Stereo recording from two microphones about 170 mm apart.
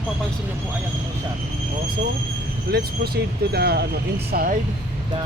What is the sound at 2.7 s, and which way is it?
Speech, 70° right (ahead or behind).